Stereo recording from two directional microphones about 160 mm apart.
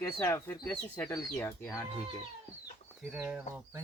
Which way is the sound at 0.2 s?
15° left (ahead or behind).